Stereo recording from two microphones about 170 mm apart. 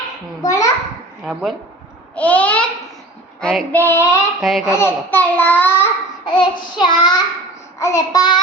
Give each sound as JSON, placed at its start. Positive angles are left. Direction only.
{"t": 0.4, "sound": "child singing", "side_deg": 20}
{"t": 1.2, "sound": "speech", "side_deg": 0}
{"t": 2.1, "sound": "a child's voice", "side_deg": 10}
{"t": 4.4, "sound": "speech", "side_deg": 0}
{"t": 4.6, "sound": "a child's voice", "side_deg": 15}
{"t": 6.2, "sound": "child singing", "side_deg": 25}